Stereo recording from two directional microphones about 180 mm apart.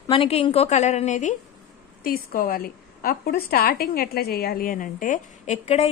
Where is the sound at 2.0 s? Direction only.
55° left (ahead or behind).